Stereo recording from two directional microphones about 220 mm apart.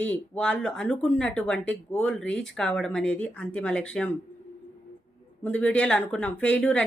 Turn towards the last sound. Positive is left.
turn(degrees=5)  # may be behind; listen again after turning